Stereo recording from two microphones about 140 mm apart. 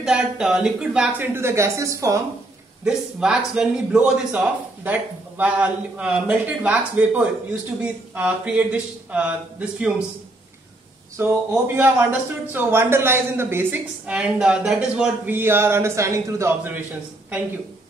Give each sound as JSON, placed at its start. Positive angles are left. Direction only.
{"t": 0.0, "sound": "speech", "side_deg": -5}
{"t": 2.8, "sound": "a man's voice", "side_deg": -5}
{"t": 11.1, "sound": "speech", "side_deg": -15}
{"t": 15.3, "sound": "a man's voice", "side_deg": -15}